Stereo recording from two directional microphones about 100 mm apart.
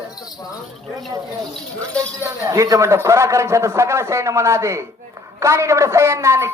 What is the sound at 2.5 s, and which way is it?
A man's voice, 35° right (ahead or behind).